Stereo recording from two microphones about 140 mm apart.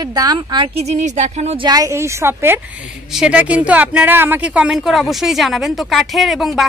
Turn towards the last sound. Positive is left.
turn(degrees=0)  # may be behind; listen again after turning